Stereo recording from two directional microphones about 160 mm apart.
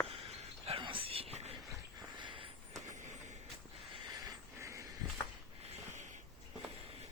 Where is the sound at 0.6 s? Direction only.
35° right (ahead or behind).